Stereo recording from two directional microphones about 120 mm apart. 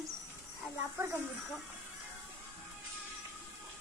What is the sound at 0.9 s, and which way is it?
Speech, 20° right (ahead or behind).